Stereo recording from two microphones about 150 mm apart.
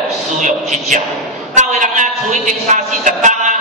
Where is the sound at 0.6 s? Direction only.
Centre (ahead or behind).